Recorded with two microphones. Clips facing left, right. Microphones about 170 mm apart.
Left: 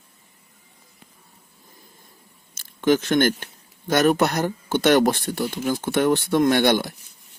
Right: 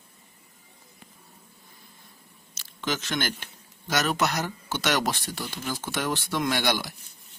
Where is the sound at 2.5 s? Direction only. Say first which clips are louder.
Left 12 dB; 50° left (ahead or behind).